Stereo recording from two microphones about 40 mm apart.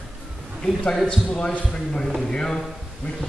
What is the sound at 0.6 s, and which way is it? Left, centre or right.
A man's voice, centre.